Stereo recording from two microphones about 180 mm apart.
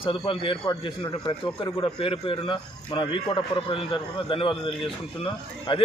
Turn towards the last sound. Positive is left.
turn(degrees=30)  # may be behind; listen again after turning